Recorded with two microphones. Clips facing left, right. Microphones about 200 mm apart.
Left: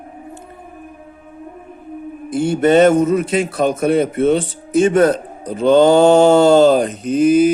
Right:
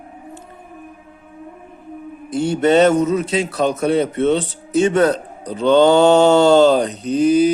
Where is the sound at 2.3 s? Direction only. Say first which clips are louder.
Left 2 dB; 55° left (ahead or behind).